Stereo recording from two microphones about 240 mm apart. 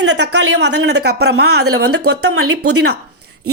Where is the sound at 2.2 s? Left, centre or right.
Right.